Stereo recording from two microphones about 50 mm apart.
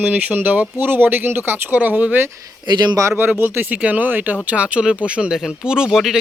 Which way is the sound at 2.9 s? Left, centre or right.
Right.